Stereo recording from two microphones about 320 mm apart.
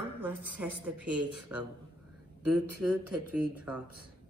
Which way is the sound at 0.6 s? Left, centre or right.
Centre.